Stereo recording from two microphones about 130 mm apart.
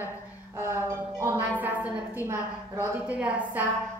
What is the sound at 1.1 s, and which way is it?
A woman's voice, 25° right (ahead or behind).